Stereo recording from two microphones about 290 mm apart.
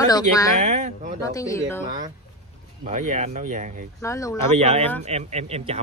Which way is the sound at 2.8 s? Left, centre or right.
Right.